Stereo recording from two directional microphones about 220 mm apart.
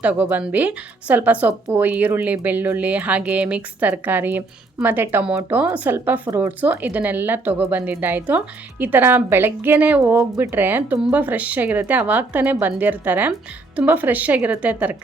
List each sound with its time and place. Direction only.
0.0 s speech: 5° right (ahead or behind)